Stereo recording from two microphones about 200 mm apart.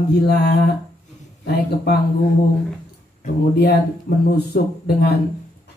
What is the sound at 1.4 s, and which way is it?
Speech, 55° left (ahead or behind).